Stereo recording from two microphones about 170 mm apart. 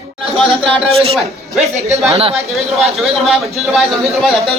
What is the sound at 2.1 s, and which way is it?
Speech, 35° right (ahead or behind).